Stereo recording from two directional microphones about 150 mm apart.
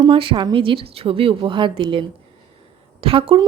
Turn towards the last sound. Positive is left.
turn(degrees=-40)  # may be behind; listen again after turning